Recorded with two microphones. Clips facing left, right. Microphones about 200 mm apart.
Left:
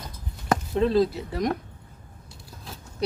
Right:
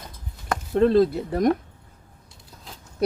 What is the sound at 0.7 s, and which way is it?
Speech, 55° right (ahead or behind).